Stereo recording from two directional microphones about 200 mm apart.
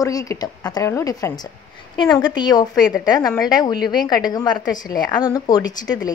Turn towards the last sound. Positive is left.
turn(degrees=20)  # may be behind; listen again after turning